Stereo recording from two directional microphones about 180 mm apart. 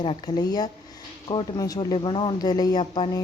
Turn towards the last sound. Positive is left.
turn(degrees=25)  # may be behind; listen again after turning